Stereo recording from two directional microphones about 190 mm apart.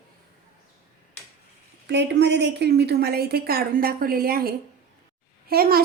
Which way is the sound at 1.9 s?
65° right (ahead or behind).